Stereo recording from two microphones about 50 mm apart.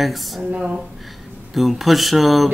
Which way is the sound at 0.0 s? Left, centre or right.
Centre.